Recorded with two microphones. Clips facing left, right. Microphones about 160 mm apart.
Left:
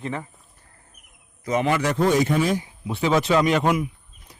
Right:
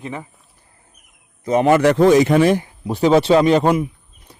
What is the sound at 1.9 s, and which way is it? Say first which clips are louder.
Speech: right 7 dB; 90° right.